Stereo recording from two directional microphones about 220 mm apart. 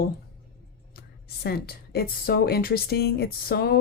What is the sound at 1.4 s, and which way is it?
Speech, 45° left (ahead or behind).